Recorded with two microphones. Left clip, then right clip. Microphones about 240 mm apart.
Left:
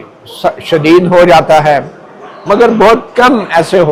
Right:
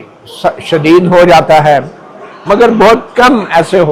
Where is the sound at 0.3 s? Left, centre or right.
Left.